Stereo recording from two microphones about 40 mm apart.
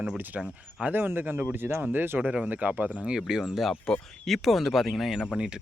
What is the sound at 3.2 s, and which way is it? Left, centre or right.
Speech, centre.